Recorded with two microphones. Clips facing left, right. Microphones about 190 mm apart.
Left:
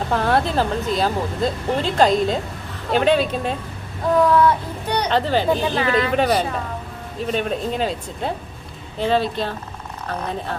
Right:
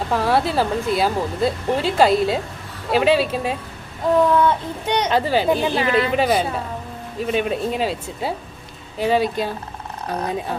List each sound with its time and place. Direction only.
0.1 s speech: 5° right (ahead or behind)
4.2 s speech: 20° right (ahead or behind)
5.0 s speech: 10° right (ahead or behind)